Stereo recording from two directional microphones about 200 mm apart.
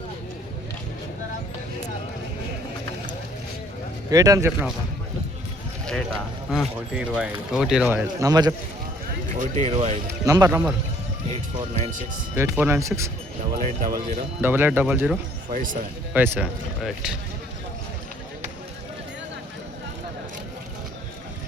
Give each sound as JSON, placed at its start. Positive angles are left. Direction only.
{"t": 4.1, "sound": "speech", "side_deg": -15}
{"t": 5.8, "sound": "speech", "side_deg": 0}
{"t": 8.2, "sound": "speech", "side_deg": -20}
{"t": 9.3, "sound": "speech", "side_deg": -40}
{"t": 10.2, "sound": "speech", "side_deg": -15}
{"t": 11.3, "sound": "speech", "side_deg": -35}
{"t": 12.4, "sound": "speech", "side_deg": -10}
{"t": 13.8, "sound": "speech", "side_deg": -45}
{"t": 14.4, "sound": "speech", "side_deg": -10}
{"t": 15.4, "sound": "speech", "side_deg": -40}
{"t": 16.1, "sound": "speech", "side_deg": -10}